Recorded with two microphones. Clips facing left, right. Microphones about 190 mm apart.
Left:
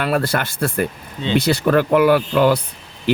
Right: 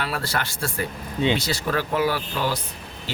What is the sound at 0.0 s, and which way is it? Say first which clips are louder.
A man's voice: left 8 dB; 55° left (ahead or behind).